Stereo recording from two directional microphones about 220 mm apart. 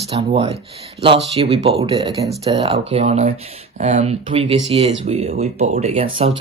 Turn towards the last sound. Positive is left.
turn(degrees=-30)  # may be behind; listen again after turning